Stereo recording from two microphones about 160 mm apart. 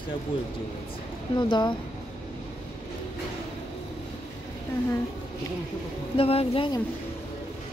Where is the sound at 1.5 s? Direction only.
30° left (ahead or behind).